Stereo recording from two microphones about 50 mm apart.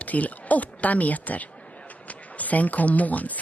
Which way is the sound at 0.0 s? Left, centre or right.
Left.